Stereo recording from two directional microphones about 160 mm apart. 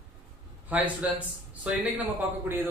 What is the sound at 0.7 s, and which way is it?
A man's voice, 10° right (ahead or behind).